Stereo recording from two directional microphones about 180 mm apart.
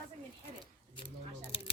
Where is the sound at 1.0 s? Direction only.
30° left (ahead or behind).